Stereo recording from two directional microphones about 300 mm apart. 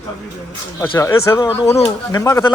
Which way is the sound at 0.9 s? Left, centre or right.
Centre.